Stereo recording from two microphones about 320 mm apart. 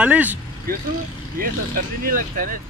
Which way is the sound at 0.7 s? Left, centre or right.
Right.